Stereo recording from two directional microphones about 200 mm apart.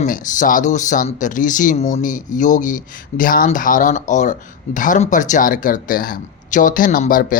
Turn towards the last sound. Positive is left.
turn(degrees=45)  # may be behind; listen again after turning